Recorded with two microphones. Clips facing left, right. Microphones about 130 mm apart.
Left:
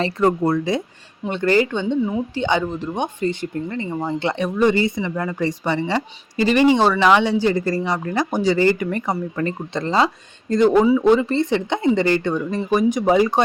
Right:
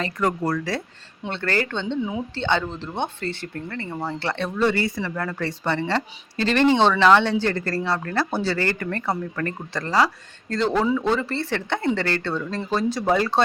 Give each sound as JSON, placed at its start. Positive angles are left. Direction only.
{"t": 0.0, "sound": "speech", "side_deg": 25}
{"t": 2.0, "sound": "a woman's voice", "side_deg": 0}
{"t": 2.3, "sound": "speech", "side_deg": 15}